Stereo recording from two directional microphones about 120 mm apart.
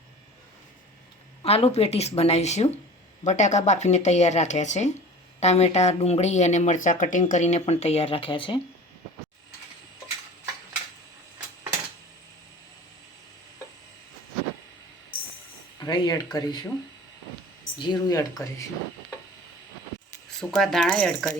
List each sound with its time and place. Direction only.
1.5 s speech: 60° left (ahead or behind)
3.2 s speech: 80° left; by 8.6 s 45° left (ahead or behind)
15.8 s speech: 35° left (ahead or behind)
17.7 s speech: 35° left (ahead or behind)
20.4 s speech: 5° left (ahead or behind)